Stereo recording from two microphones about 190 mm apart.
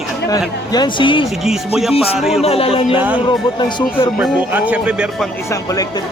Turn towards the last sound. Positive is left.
turn(degrees=20)  # may be behind; listen again after turning